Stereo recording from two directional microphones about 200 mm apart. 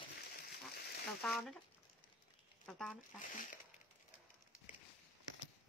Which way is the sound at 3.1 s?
40° left (ahead or behind).